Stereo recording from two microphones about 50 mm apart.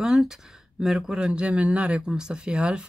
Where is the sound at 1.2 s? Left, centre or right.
Centre.